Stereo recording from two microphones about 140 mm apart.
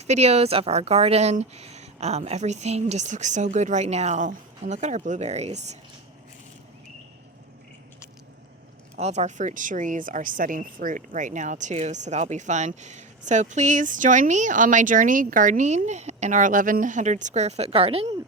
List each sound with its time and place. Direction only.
0.1 s speech: 50° right (ahead or behind)
9.0 s a woman's voice: 55° right (ahead or behind)